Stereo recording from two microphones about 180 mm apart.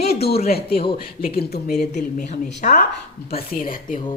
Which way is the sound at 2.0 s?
40° left (ahead or behind).